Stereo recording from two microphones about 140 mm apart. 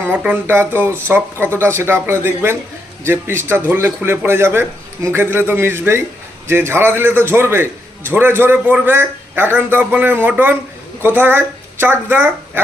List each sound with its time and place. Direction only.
0.0 s a man's voice: 10° right (ahead or behind)